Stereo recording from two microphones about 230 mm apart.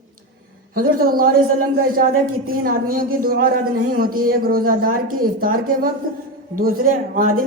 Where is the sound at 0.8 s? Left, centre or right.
Right.